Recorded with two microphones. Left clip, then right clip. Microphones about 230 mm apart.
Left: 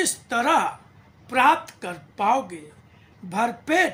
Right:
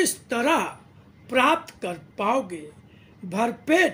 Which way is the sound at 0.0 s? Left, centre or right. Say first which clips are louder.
Left 1 dB; centre.